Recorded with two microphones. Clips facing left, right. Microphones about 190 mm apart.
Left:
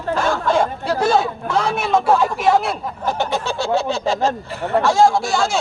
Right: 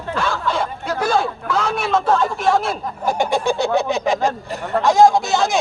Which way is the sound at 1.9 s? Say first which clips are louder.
Left 2 dB; 10° left (ahead or behind).